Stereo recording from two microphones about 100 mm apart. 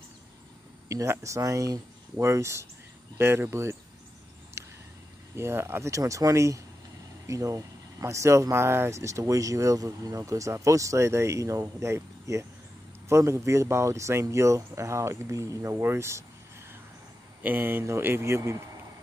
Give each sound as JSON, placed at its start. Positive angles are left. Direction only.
{"t": 0.8, "sound": "speech", "side_deg": -30}
{"t": 4.6, "sound": "a sound", "side_deg": -25}
{"t": 5.3, "sound": "speech", "side_deg": -25}
{"t": 17.4, "sound": "speech", "side_deg": -20}